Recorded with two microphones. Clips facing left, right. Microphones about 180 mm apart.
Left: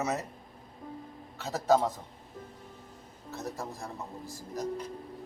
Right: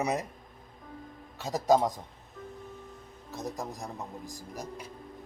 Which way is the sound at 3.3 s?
15° right (ahead or behind).